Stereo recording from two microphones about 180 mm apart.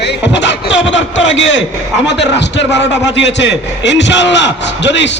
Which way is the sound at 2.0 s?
75° left (ahead or behind).